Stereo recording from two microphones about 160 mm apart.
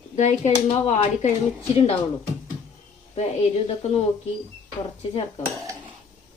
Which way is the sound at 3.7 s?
40° left (ahead or behind).